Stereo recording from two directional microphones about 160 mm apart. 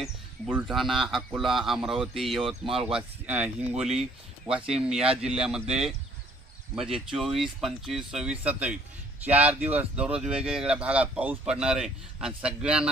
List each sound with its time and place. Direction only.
0.0 s speech: 5° right (ahead or behind)
2.4 s speech: 35° right (ahead or behind)
2.9 s speech: 5° right (ahead or behind)